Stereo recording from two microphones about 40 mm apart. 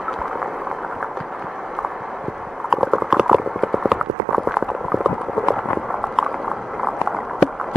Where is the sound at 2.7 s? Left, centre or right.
Centre.